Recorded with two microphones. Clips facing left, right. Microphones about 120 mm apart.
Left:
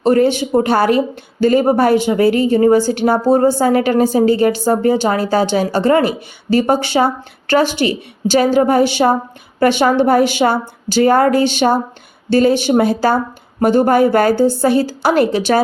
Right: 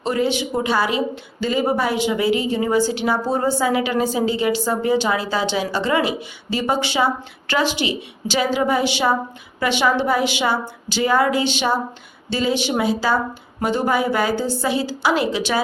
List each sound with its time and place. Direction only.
0.0 s a woman's voice: 50° left (ahead or behind)